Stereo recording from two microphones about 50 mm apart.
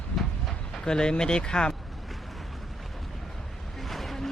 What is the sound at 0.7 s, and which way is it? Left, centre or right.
Speech, centre.